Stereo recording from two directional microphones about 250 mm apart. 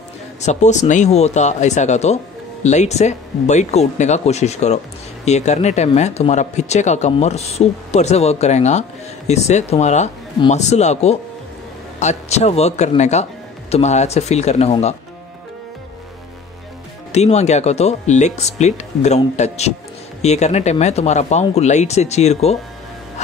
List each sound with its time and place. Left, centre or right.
0.4 s speech: left
17.1 s speech: left